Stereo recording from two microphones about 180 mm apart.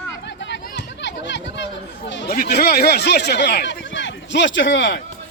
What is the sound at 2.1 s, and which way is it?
Chatter, 80° left.